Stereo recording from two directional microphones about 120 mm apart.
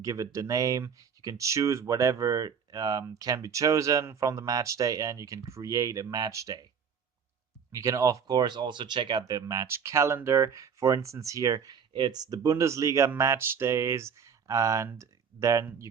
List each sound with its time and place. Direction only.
0.0 s speech: 30° right (ahead or behind)
7.7 s speech: 25° right (ahead or behind)